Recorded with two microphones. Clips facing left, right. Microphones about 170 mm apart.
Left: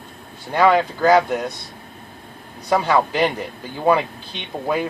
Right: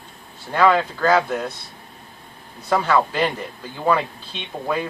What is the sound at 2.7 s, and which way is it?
Speech, 15° left (ahead or behind).